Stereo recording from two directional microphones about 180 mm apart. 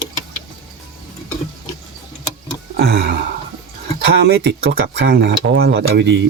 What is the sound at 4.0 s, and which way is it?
Speech, 70° right (ahead or behind).